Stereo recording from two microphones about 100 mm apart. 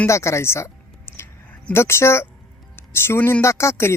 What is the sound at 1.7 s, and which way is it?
Speech, 25° left (ahead or behind).